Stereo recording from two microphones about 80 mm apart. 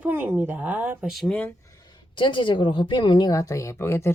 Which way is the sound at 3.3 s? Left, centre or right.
Left.